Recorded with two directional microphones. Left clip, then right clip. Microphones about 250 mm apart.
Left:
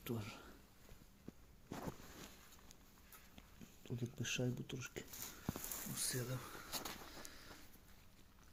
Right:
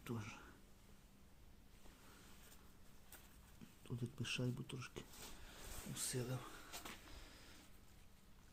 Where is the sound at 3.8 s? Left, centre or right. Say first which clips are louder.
Left 2 dB; centre.